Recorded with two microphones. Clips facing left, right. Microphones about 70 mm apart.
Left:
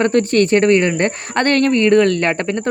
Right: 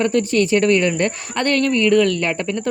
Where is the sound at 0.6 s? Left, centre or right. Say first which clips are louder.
Left 3 dB; left.